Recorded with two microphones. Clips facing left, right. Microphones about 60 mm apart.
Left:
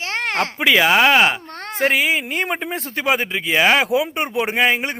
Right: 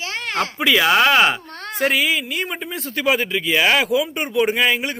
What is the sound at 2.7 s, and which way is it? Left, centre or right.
A man's voice, left.